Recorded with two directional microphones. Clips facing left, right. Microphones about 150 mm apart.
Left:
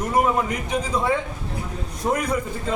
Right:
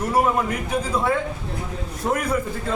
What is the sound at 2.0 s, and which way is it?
Speech, 5° left (ahead or behind).